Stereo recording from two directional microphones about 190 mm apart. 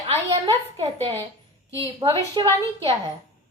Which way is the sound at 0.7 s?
30° right (ahead or behind).